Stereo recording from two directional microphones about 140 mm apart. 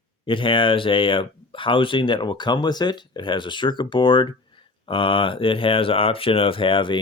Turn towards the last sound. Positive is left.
turn(degrees=35)  # may be behind; listen again after turning